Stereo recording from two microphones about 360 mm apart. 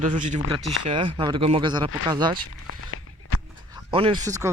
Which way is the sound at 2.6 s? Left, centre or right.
Left.